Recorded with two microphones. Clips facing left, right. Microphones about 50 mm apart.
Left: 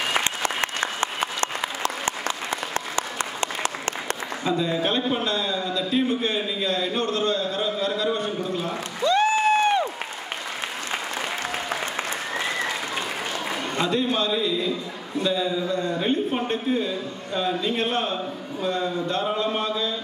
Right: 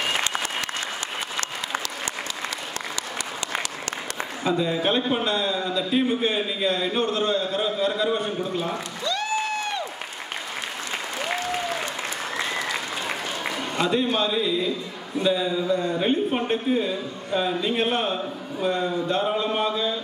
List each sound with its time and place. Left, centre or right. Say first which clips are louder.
0.2 s applause: left 2 dB; left
4.5 s a man's voice: right 1 dB; centre
9.0 s a sound: left 8 dB; left
13.7 s a man's voice: right 1 dB; centre